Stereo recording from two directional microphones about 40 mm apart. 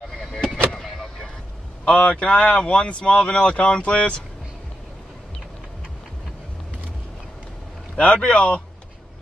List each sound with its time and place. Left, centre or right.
0.2 s vehicle: centre
1.9 s speech: left
8.0 s speech: left